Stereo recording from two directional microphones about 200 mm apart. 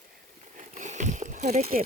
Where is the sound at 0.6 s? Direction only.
35° right (ahead or behind).